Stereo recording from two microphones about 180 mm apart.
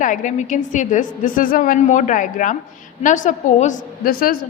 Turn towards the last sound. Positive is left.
turn(degrees=55)  # may be behind; listen again after turning